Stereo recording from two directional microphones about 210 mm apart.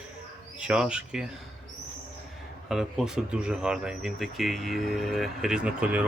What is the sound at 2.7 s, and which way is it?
Speech, centre (ahead or behind).